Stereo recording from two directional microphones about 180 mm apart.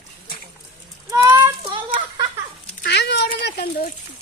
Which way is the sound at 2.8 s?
70° left (ahead or behind).